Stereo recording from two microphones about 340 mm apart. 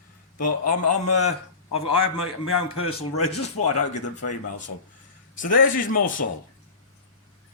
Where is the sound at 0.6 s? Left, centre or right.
Left.